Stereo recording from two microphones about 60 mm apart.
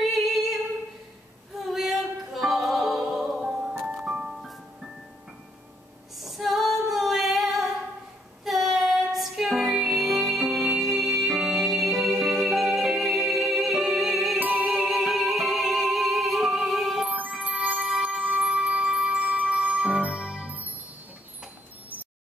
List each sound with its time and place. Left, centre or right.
0.0 s music: centre
1.7 s music: centre
6.1 s female singing: centre
8.5 s music: centre
14.4 s music: right
14.9 s music: centre
17.0 s music: right